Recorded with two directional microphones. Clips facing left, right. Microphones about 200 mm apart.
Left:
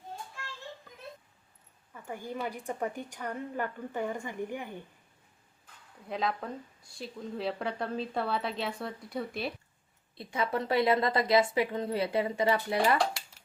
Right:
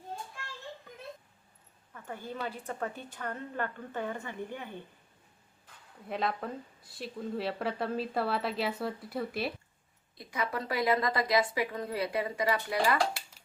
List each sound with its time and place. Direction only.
1.9 s a woman's voice: 10° left (ahead or behind)
6.1 s a woman's voice: centre (ahead or behind)
10.2 s a woman's voice: 25° left (ahead or behind)